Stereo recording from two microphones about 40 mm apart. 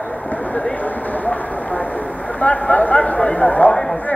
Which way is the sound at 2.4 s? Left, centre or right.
Left.